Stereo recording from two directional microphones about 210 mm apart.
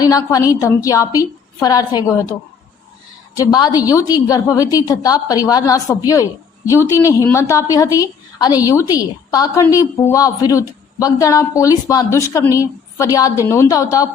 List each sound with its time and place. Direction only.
0.0 s a woman's voice: 15° left (ahead or behind)
3.3 s a woman's voice: 20° left (ahead or behind)